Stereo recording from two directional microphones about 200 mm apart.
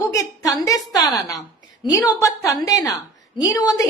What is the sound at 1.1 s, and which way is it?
A woman's voice, 15° left (ahead or behind).